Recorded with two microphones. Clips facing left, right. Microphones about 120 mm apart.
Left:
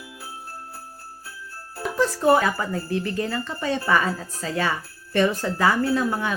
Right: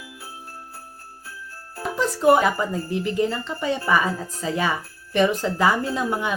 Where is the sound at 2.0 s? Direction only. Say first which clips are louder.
Right 1 dB; 15° right (ahead or behind).